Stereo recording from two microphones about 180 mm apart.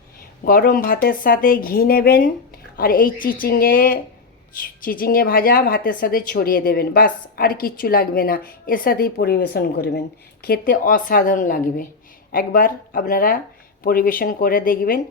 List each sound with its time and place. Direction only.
0.4 s a woman's voice: 50° left (ahead or behind)